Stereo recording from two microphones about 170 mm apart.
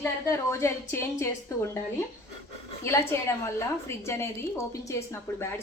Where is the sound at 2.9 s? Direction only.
15° left (ahead or behind).